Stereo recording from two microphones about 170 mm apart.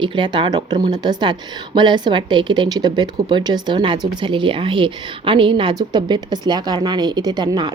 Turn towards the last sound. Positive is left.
turn(degrees=-25)  # may be behind; listen again after turning